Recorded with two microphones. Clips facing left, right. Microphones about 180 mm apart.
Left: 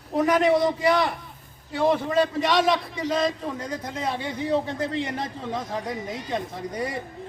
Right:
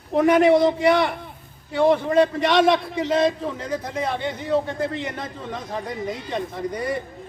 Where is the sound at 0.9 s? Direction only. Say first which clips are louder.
Right 3 dB; 60° right (ahead or behind).